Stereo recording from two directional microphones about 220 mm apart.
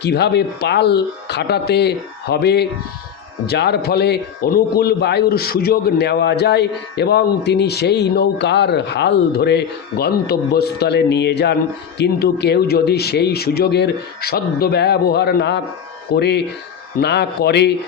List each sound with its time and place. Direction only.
0.0 s a man's voice: 50° left (ahead or behind)